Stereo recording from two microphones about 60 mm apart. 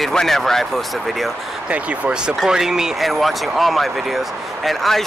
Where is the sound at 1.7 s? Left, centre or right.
Right; by 5.0 s centre.